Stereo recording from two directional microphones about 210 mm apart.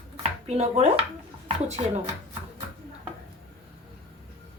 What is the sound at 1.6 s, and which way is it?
Speech, 30° right (ahead or behind).